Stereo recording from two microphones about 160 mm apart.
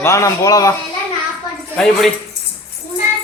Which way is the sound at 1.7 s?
5° left (ahead or behind).